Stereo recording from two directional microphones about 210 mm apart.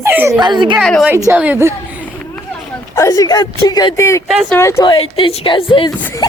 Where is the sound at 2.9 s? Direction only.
15° left (ahead or behind).